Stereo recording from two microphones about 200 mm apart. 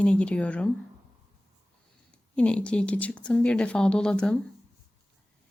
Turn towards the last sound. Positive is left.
turn(degrees=5)  # may be behind; listen again after turning